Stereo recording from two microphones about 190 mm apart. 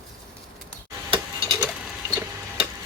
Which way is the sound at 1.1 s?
30° right (ahead or behind).